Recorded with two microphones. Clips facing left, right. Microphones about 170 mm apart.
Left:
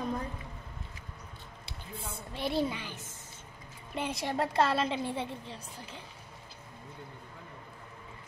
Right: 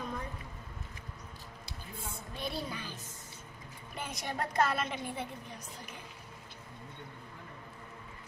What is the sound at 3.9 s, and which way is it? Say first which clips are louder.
A woman's voice: left 6 dB; 25° left (ahead or behind).